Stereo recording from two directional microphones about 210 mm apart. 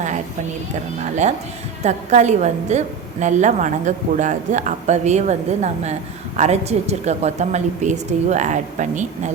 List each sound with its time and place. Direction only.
1.8 s a woman's voice: 35° right (ahead or behind)